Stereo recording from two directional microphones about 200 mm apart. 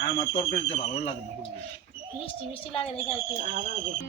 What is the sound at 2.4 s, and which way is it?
Speech, 25° left (ahead or behind).